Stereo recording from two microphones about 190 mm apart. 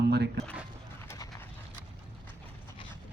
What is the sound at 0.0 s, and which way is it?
Zipper, 60° right (ahead or behind).